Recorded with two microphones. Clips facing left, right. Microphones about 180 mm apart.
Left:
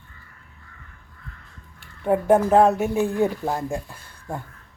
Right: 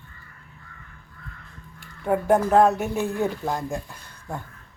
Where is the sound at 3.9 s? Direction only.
10° left (ahead or behind).